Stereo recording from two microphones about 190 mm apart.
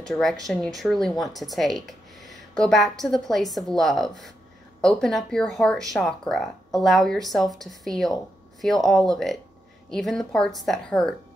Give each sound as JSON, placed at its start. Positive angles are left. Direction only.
{"t": 0.0, "sound": "speech", "side_deg": 0}